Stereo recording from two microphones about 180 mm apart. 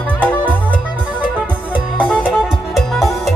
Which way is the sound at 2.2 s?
5° right (ahead or behind).